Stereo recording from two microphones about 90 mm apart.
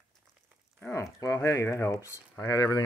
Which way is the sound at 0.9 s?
35° left (ahead or behind).